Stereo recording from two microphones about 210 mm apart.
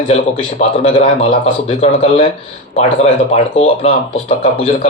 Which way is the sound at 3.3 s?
30° left (ahead or behind).